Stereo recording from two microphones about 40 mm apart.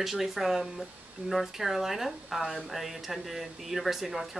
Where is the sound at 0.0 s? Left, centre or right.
Centre.